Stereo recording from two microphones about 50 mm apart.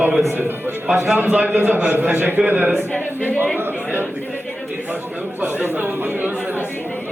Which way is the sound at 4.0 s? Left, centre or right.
Right.